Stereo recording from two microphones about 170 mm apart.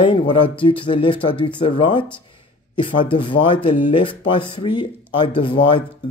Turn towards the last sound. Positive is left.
turn(degrees=30)  # may be behind; listen again after turning